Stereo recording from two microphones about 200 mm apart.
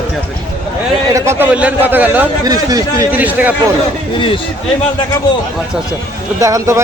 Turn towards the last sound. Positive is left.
turn(degrees=-15)  # may be behind; listen again after turning